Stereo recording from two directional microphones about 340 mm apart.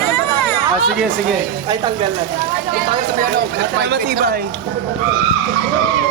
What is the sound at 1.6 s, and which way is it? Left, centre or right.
Speech, centre.